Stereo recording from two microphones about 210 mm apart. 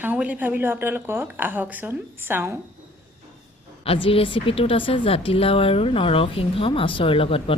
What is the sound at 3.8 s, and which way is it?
A woman's voice, 25° left (ahead or behind).